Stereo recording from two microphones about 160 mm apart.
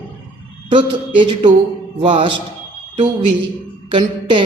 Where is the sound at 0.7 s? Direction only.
30° right (ahead or behind).